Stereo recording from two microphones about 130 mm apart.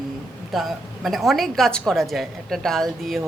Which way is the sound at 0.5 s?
Centre (ahead or behind).